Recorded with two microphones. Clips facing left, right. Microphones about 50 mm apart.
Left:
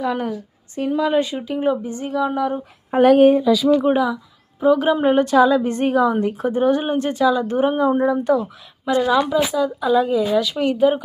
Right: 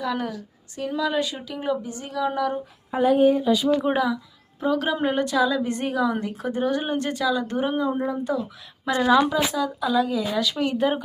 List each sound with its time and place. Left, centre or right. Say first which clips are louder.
0.0 s speech: left 5 dB; left
2.2 s speech: left 2 dB; centre
3.0 s speech: left 6 dB; left
3.8 s speech: left 5 dB; centre
5.0 s a woman's voice: left 8 dB; left
7.8 s speech: left 7 dB; left
8.0 s speech: left 8 dB; left
9.0 s speech: left 1 dB; centre
9.6 s speech: left 5 dB; left
10.8 s speech: left 8 dB; centre